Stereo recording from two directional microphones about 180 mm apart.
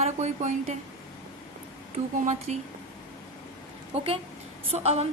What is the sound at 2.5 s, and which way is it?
Speech, 40° right (ahead or behind).